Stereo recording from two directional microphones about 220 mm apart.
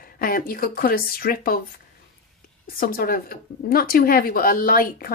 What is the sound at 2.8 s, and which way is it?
Speech, 40° left (ahead or behind).